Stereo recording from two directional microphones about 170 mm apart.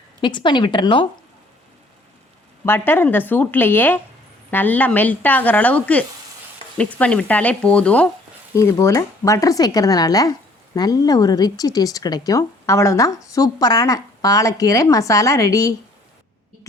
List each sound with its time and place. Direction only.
0.2 s speech: 30° left (ahead or behind)
2.6 s speech: 15° left (ahead or behind)
8.5 s speech: 15° left (ahead or behind)